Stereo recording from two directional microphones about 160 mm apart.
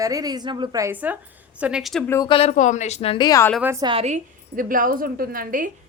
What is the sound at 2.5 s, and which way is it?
Speech, 50° left (ahead or behind).